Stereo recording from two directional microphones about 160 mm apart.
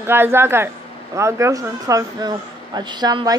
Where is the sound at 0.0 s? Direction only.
15° right (ahead or behind).